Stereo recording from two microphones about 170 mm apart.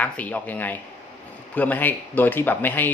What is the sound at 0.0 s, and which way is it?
Speech, 10° left (ahead or behind).